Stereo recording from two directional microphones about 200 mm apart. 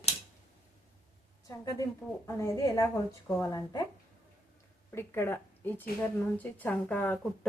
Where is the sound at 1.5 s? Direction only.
15° left (ahead or behind).